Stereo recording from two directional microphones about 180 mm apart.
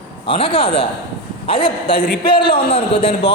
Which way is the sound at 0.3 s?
30° left (ahead or behind).